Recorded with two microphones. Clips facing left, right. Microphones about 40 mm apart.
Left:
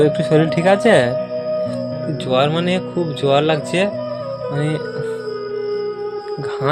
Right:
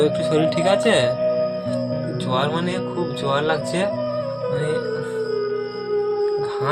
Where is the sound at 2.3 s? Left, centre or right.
Left.